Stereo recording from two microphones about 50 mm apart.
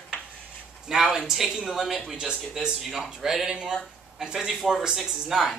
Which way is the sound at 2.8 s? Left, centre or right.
Centre.